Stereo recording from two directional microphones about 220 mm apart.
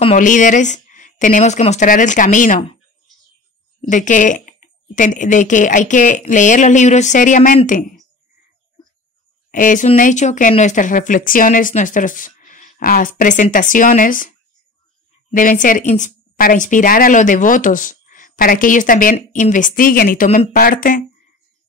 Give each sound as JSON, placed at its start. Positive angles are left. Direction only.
{"t": 0.0, "sound": "a woman's voice", "side_deg": 35}
{"t": 3.9, "sound": "a woman's voice", "side_deg": 35}
{"t": 9.5, "sound": "a woman's voice", "side_deg": 35}
{"t": 15.3, "sound": "a woman's voice", "side_deg": 35}